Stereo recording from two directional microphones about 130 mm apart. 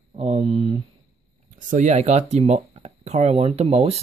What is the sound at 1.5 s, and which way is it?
Speech, 70° right (ahead or behind).